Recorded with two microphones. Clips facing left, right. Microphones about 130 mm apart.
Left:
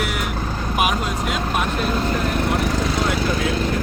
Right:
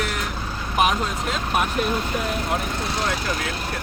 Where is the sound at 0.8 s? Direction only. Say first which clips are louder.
Right 1 dB; 5° left (ahead or behind).